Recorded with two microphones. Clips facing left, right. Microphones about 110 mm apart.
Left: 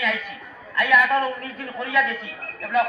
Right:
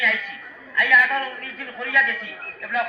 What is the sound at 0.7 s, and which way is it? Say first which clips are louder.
Speech: left 1 dB; 15° left (ahead or behind).